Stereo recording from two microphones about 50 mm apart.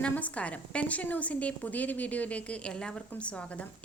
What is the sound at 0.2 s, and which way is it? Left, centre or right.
A woman's voice, left.